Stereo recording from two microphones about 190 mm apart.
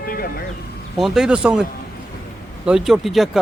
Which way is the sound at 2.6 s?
Centre (ahead or behind).